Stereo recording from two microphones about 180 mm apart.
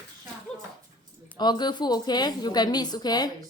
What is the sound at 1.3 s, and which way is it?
A woman's voice, 25° left (ahead or behind).